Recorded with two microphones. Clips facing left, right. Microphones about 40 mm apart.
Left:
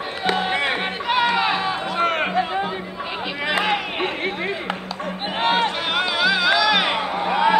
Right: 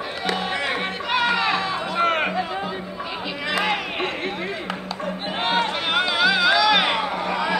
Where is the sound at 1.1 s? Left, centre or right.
Centre.